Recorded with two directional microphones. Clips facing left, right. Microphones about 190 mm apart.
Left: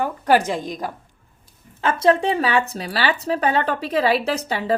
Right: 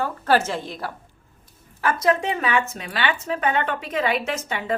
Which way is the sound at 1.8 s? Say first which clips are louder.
Left 3 dB; 25° left (ahead or behind).